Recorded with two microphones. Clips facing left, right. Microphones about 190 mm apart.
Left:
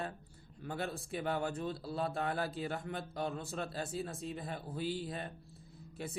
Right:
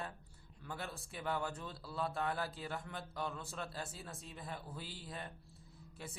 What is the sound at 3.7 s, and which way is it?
A man's voice, 25° left (ahead or behind).